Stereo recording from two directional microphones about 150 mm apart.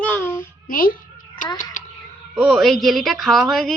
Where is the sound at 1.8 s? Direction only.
60° left (ahead or behind).